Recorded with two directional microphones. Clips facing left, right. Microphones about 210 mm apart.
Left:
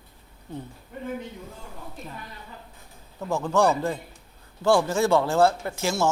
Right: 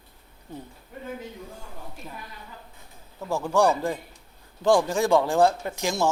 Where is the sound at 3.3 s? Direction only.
10° right (ahead or behind).